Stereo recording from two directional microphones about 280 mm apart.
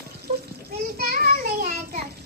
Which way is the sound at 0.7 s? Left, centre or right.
Right.